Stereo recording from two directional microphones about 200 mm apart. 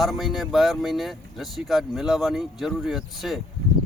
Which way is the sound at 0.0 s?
Centre (ahead or behind).